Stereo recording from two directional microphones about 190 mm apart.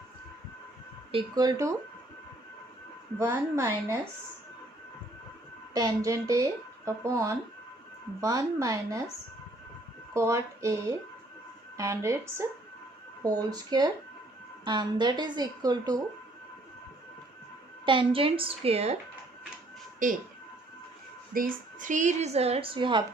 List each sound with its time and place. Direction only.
1.1 s speech: 20° right (ahead or behind)
3.2 s speech: 15° right (ahead or behind)
5.7 s speech: 20° right (ahead or behind)
10.2 s speech: 15° right (ahead or behind)
17.8 s speech: 25° right (ahead or behind)
20.0 s speech: 45° right (ahead or behind)
21.3 s speech: 45° right (ahead or behind); by 23.0 s 25° right (ahead or behind)